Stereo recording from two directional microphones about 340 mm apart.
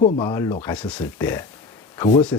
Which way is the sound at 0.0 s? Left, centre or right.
Centre.